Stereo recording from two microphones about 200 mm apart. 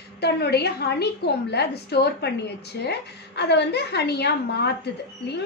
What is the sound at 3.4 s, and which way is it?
A woman's voice, 55° left (ahead or behind).